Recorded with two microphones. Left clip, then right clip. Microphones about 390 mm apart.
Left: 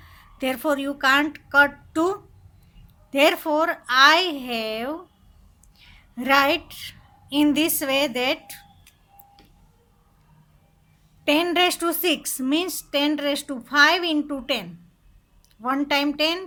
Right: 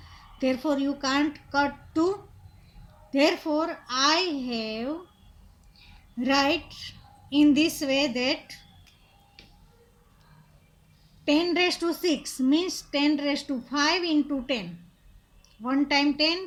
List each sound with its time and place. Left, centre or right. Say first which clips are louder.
0.3 s a woman's voice: left 3 dB; left
6.1 s a woman's voice: left 5 dB; left
11.3 s a woman's voice: left 4 dB; left